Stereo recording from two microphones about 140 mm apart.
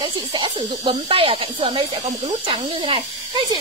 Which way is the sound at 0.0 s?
35° right (ahead or behind).